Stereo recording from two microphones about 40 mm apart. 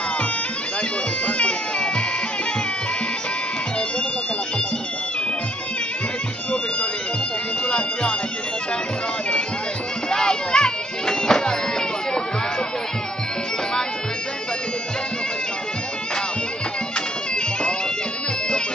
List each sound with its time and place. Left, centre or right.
1.2 s music: left
7.6 s music: left
10.0 s music: centre